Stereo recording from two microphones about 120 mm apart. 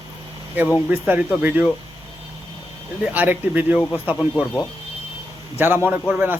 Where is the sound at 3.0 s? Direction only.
15° right (ahead or behind).